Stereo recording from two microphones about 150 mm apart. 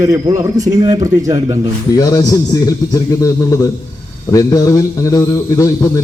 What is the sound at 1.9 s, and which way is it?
A man's voice, 25° left (ahead or behind).